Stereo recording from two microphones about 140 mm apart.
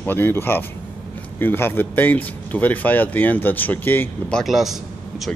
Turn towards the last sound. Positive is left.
turn(degrees=0)  # may be behind; listen again after turning